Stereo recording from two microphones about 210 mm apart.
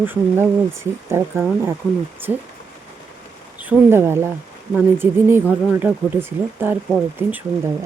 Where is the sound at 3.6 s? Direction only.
10° right (ahead or behind).